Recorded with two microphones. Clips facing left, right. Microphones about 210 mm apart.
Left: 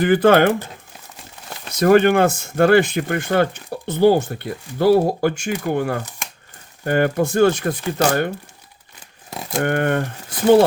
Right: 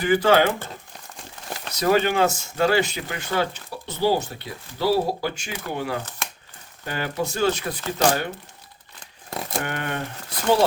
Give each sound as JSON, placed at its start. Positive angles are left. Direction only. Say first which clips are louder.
{"t": 0.0, "sound": "speech", "louder": "left 5 dB", "side_deg": 55}
{"t": 1.7, "sound": "speech", "louder": "left 7 dB", "side_deg": 50}
{"t": 9.6, "sound": "speech", "louder": "left 10 dB", "side_deg": 50}